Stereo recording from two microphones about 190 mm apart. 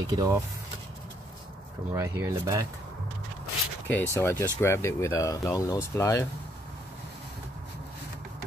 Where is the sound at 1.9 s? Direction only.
15° right (ahead or behind).